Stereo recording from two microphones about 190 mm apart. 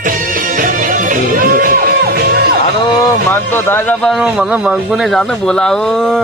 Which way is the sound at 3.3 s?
10° left (ahead or behind).